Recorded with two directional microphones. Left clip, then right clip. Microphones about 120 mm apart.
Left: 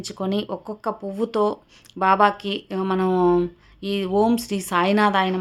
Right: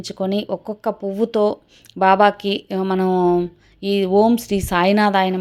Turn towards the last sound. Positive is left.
turn(degrees=-35)  # may be behind; listen again after turning